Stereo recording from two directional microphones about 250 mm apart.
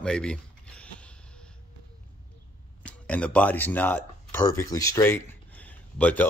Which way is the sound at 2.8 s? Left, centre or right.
Centre.